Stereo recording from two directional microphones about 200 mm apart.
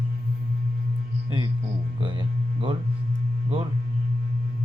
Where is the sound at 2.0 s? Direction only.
25° right (ahead or behind).